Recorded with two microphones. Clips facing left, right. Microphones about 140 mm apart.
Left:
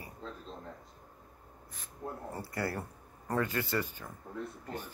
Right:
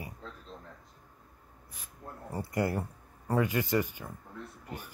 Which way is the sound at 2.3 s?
20° right (ahead or behind).